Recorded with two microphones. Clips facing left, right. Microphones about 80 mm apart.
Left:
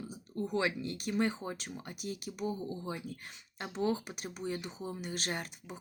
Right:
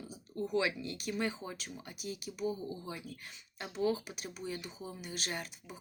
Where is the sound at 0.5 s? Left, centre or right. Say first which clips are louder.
Even; left.